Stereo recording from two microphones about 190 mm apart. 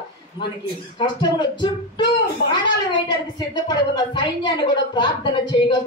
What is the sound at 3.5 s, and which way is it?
A woman's voice, 20° left (ahead or behind).